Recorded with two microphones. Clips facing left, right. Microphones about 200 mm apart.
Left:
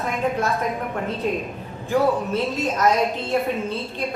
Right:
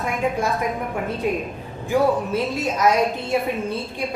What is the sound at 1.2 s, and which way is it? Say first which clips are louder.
A woman's voice: right 1 dB; 10° right (ahead or behind).